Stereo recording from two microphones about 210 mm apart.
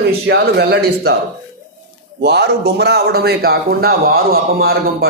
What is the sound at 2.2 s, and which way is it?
A man's voice, 50° right (ahead or behind).